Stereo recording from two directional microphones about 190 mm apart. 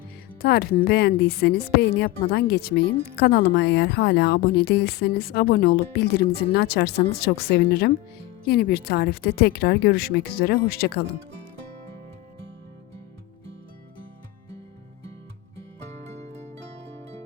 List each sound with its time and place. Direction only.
0.4 s a woman's voice: 55° left (ahead or behind)
16.3 s zither: 35° right (ahead or behind)